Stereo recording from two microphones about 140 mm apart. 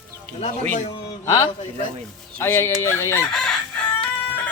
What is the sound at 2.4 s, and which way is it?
Speech, 15° left (ahead or behind).